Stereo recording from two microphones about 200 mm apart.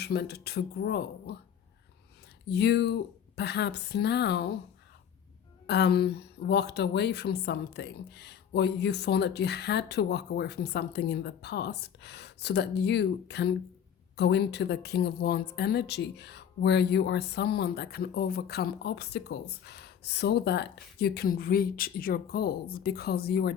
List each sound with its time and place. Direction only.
0.0 s a woman's voice: 50° left (ahead or behind)
2.5 s speech: 55° left (ahead or behind)
5.6 s a woman's voice: 55° left (ahead or behind)